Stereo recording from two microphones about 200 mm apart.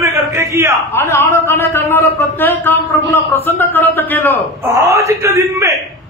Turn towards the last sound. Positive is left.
turn(degrees=-15)  # may be behind; listen again after turning